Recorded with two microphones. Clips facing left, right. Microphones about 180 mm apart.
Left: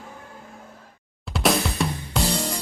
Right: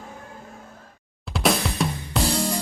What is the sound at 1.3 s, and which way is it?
Drum kit, centre (ahead or behind).